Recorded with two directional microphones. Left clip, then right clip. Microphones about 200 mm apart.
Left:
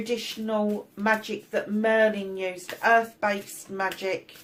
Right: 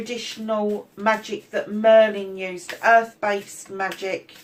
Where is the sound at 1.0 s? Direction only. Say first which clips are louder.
Right 3 dB; 45° left (ahead or behind).